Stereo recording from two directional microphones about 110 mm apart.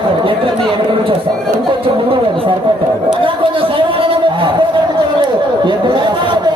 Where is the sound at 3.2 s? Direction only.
50° right (ahead or behind).